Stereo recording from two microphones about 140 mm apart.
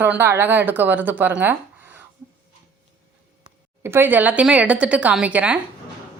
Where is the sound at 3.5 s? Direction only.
40° right (ahead or behind).